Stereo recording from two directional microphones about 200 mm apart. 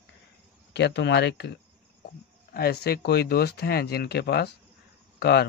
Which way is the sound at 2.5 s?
50° left (ahead or behind).